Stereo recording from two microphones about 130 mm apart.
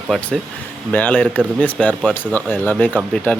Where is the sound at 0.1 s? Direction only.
10° left (ahead or behind).